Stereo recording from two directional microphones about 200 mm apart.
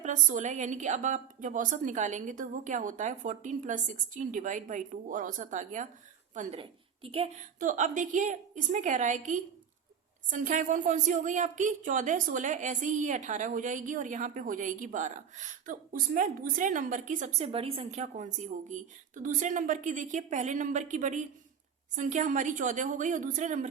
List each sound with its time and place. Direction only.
0.0 s a woman's voice: 40° right (ahead or behind)